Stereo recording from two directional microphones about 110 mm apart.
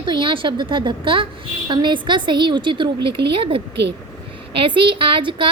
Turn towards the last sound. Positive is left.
turn(degrees=-50)  # may be behind; listen again after turning